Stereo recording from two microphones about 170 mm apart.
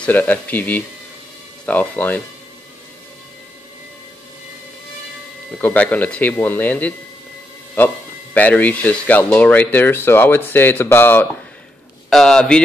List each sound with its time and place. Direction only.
0.0 s speech: 10° left (ahead or behind)
5.6 s speech: 10° left (ahead or behind)
8.4 s a man's voice: 10° left (ahead or behind)